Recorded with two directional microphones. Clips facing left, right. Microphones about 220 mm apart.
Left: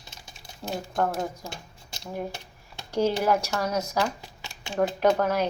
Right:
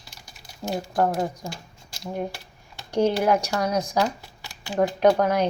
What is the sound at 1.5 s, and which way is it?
Speech, 20° left (ahead or behind).